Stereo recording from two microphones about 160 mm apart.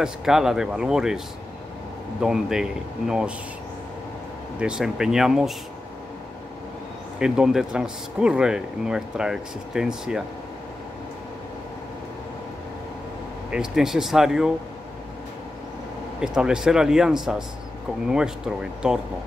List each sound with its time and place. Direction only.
0.0 s speech: 5° right (ahead or behind)
2.2 s speech: 5° right (ahead or behind)
4.6 s speech: 5° right (ahead or behind)
7.2 s speech: 5° right (ahead or behind)
13.5 s speech: 5° right (ahead or behind)
16.2 s speech: 5° right (ahead or behind)